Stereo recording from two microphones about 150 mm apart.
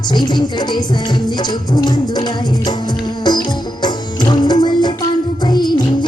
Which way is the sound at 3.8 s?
30° left (ahead or behind).